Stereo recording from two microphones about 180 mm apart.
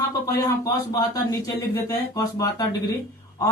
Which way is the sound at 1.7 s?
20° left (ahead or behind).